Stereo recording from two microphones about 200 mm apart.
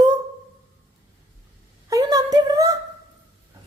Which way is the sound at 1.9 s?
15° right (ahead or behind).